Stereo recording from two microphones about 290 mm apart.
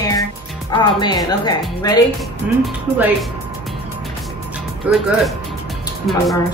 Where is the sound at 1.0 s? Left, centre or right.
Centre.